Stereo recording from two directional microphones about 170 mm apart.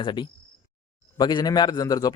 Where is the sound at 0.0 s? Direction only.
25° left (ahead or behind).